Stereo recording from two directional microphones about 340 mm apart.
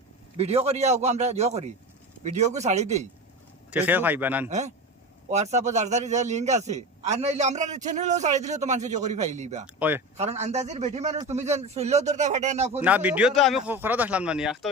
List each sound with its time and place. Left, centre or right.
0.3 s a man's voice: centre
3.7 s speech: centre
4.4 s a man's voice: right
9.7 s speech: centre
10.2 s a man's voice: centre
12.8 s speech: centre